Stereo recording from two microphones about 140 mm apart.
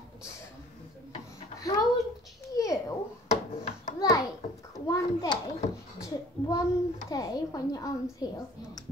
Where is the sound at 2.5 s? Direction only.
25° left (ahead or behind).